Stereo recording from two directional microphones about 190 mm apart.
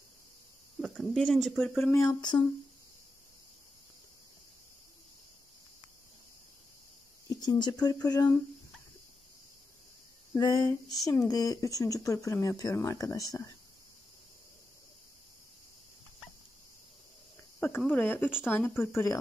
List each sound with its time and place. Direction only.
0.7 s speech: centre (ahead or behind)
1.9 s speech: 15° left (ahead or behind)
7.4 s speech: 20° left (ahead or behind)
10.3 s speech: 20° left (ahead or behind)
17.6 s speech: 10° left (ahead or behind)